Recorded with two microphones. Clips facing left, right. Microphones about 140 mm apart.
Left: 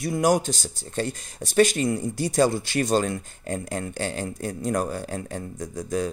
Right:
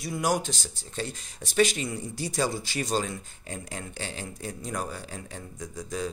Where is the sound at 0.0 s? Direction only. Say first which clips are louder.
Left 6 dB; 50° left (ahead or behind).